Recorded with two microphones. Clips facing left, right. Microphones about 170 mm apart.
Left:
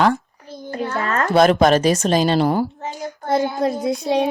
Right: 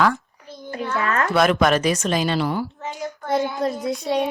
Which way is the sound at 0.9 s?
35° left (ahead or behind).